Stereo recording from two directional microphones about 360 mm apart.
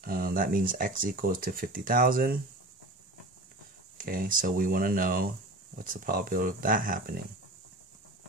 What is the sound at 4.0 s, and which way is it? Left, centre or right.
Speech, right.